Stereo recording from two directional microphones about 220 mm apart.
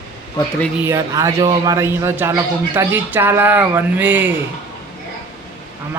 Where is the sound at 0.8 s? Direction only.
15° right (ahead or behind).